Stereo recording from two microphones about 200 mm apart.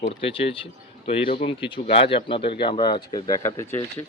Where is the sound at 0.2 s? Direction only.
25° left (ahead or behind).